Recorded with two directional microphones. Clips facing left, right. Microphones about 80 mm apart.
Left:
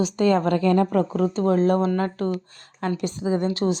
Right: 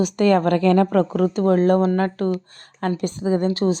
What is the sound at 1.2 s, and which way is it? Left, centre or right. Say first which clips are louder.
Speech: right 2 dB; right.